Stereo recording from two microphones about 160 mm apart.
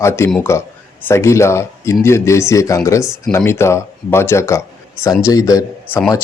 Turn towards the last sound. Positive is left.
turn(degrees=20)  # may be behind; listen again after turning